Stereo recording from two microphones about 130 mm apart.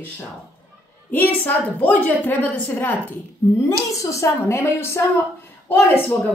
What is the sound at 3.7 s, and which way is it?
A woman's voice, 25° left (ahead or behind).